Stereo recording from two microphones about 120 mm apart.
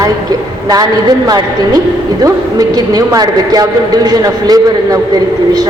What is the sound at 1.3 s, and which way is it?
A woman's voice, 35° right (ahead or behind).